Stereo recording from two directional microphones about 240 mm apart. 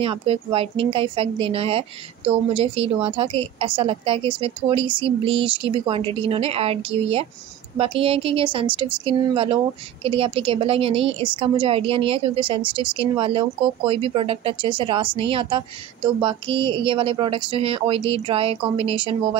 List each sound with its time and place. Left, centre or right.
0.0 s a woman's voice: right